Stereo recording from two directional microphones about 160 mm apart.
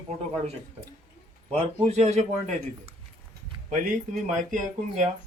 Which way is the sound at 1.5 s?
40° right (ahead or behind).